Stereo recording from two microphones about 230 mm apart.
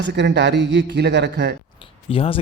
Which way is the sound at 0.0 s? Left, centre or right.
Right.